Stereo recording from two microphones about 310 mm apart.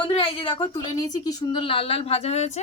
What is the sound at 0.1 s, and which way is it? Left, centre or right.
A woman's voice, centre.